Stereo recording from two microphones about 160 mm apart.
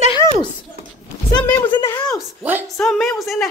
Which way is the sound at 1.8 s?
25° left (ahead or behind).